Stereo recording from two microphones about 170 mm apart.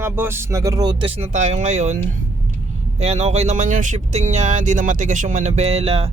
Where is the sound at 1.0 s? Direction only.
30° right (ahead or behind).